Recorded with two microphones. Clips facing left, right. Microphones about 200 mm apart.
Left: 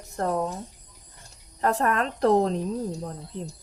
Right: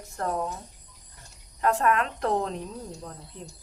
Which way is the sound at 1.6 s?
35° left (ahead or behind).